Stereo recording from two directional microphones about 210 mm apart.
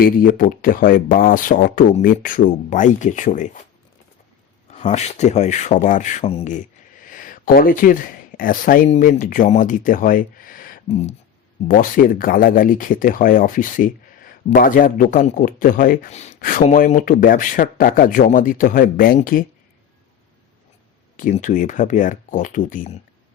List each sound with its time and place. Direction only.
0.0 s speech: 45° left (ahead or behind)
4.7 s speech: 35° left (ahead or behind)
7.0 s a sound: 40° left (ahead or behind)
8.4 s speech: 40° left (ahead or behind)
21.2 s speech: 40° left (ahead or behind)